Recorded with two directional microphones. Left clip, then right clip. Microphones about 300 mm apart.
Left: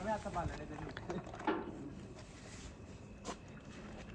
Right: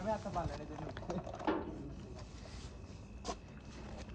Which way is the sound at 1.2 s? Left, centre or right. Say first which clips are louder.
Right 2 dB; right.